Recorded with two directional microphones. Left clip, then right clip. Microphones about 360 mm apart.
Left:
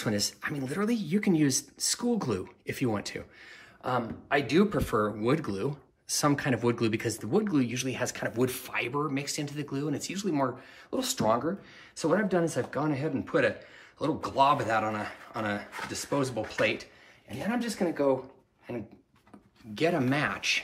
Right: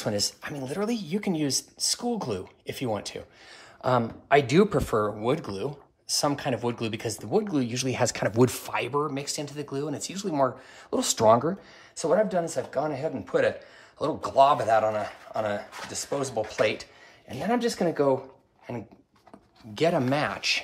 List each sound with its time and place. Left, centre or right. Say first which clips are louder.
0.0 s speech: right 2 dB; centre
3.8 s speech: right 6 dB; right
12.0 s speech: right 3 dB; centre
17.6 s speech: right 4 dB; right
19.7 s speech: right 3 dB; centre